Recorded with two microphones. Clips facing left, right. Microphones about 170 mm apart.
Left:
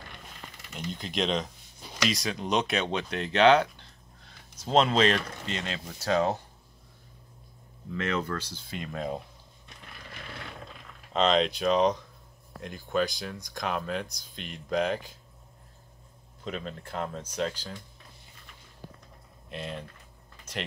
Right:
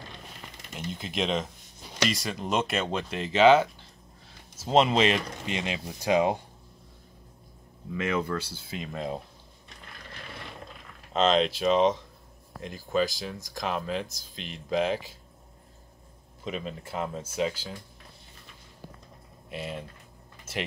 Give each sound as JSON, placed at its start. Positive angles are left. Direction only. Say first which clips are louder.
{"t": 0.7, "sound": "speech", "louder": "even", "side_deg": -5}
{"t": 7.9, "sound": "speech", "louder": "right 2 dB", "side_deg": -10}
{"t": 11.1, "sound": "speech", "louder": "right 1 dB", "side_deg": 0}
{"t": 16.4, "sound": "speech", "louder": "right 2 dB", "side_deg": -5}
{"t": 19.5, "sound": "speech", "louder": "right 1 dB", "side_deg": -5}